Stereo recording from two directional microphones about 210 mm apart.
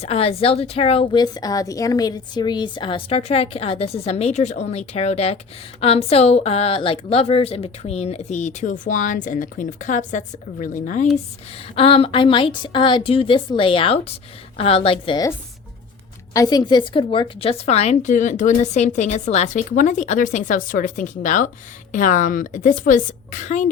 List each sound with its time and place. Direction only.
0.0 s a woman's voice: 30° left (ahead or behind)
16.3 s a woman's voice: 15° left (ahead or behind); by 23.6 s 35° left (ahead or behind)